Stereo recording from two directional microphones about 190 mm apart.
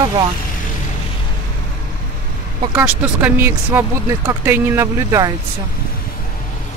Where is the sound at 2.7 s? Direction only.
10° right (ahead or behind).